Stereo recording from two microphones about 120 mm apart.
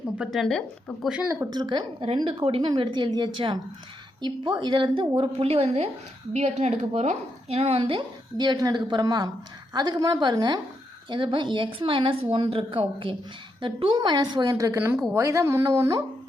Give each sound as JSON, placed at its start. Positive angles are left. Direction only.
{"t": 0.2, "sound": "speech", "side_deg": 0}
{"t": 1.5, "sound": "a woman's voice", "side_deg": -35}
{"t": 6.3, "sound": "a woman's voice", "side_deg": -70}
{"t": 14.6, "sound": "speech", "side_deg": -20}